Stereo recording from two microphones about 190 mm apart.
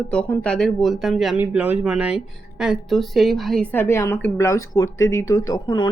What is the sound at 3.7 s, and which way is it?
Speech, 10° left (ahead or behind).